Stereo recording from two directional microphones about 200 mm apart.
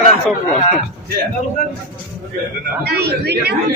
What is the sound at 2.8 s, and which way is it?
Speech, 55° right (ahead or behind).